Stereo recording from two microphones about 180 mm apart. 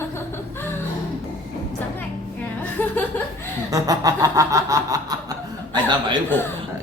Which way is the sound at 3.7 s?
20° right (ahead or behind).